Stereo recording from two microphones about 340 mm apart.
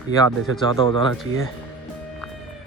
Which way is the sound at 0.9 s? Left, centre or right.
Centre.